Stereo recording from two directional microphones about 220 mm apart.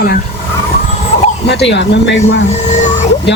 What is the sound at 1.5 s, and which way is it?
Speech, 50° left (ahead or behind).